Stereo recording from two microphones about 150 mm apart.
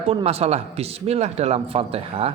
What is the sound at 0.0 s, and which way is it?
Speech, 40° right (ahead or behind).